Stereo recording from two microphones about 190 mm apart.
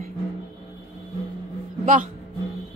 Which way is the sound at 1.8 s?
45° right (ahead or behind).